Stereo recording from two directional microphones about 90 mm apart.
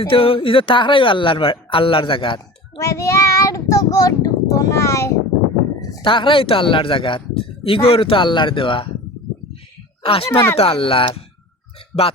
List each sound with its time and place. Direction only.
0.0 s speech: 90° left; by 2.4 s 75° left (ahead or behind)
2.8 s child singing: 35° left (ahead or behind)
6.0 s speech: 70° left (ahead or behind)
10.0 s speech: 90° left
11.9 s music: 15° left (ahead or behind)